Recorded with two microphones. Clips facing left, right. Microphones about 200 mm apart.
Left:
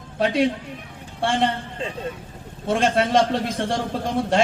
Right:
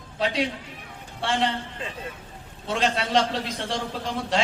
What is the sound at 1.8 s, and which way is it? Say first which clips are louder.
Speech: left 6 dB; 25° left (ahead or behind).